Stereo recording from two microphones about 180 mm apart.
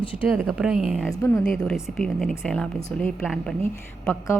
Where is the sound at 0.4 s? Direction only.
5° right (ahead or behind).